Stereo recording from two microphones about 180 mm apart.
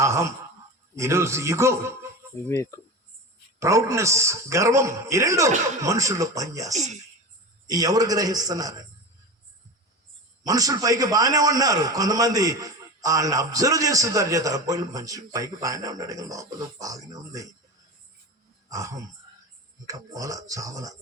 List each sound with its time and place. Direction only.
0.0 s a sound: 15° right (ahead or behind)
0.9 s a man's voice: 15° right (ahead or behind)
2.5 s speech: 15° left (ahead or behind)
3.6 s a man's voice: 15° right (ahead or behind)
6.7 s speech: 40° right (ahead or behind)
7.7 s a man's voice: 20° right (ahead or behind)
10.4 s a man's voice: 20° right (ahead or behind)
18.7 s a man's voice: 20° right (ahead or behind)